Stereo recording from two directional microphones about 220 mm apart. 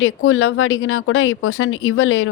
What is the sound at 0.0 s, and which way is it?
Speech, 65° left (ahead or behind).